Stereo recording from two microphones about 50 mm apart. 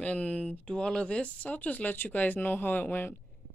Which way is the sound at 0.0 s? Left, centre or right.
Left.